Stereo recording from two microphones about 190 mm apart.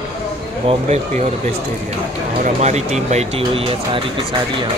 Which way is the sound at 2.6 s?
35° right (ahead or behind).